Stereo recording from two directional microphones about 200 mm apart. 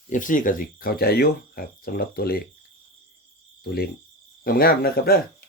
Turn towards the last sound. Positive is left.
turn(degrees=50)  # may be behind; listen again after turning